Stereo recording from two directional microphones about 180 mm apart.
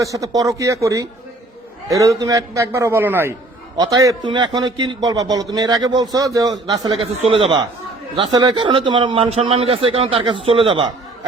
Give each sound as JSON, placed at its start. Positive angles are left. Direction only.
{"t": 0.0, "sound": "a man's voice", "side_deg": -20}